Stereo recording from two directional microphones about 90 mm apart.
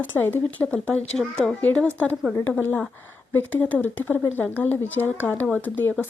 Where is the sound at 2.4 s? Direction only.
20° left (ahead or behind).